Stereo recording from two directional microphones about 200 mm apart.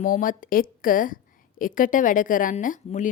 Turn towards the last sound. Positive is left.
turn(degrees=40)  # may be behind; listen again after turning